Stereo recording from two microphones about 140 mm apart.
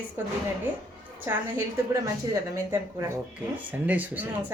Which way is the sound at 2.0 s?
25° right (ahead or behind).